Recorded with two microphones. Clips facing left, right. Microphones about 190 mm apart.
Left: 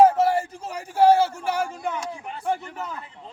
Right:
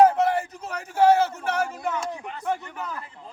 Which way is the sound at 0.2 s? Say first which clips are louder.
Left 2 dB; 30° left (ahead or behind).